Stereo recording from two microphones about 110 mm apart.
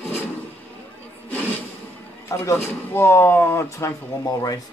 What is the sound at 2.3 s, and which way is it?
A man's voice, 25° left (ahead or behind).